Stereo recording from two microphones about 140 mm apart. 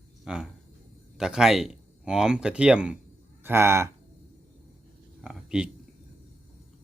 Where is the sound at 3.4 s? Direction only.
20° right (ahead or behind).